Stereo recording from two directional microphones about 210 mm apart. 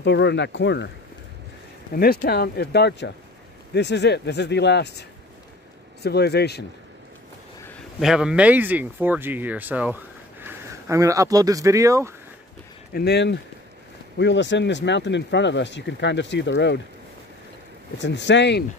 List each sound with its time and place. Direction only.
0.0 s speech: 55° left (ahead or behind)
2.0 s speech: 50° left (ahead or behind)
6.0 s speech: 50° left (ahead or behind)
8.0 s speech: 5° right (ahead or behind)
12.9 s speech: 50° left (ahead or behind)
17.9 s speech: 55° left (ahead or behind)